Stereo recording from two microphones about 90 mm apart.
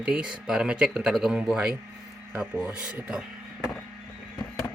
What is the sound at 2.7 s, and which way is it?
Speech, 15° right (ahead or behind).